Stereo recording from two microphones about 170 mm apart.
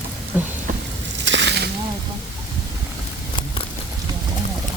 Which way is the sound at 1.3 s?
90° right.